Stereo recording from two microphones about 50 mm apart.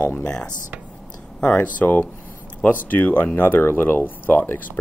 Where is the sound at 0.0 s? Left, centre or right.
Left.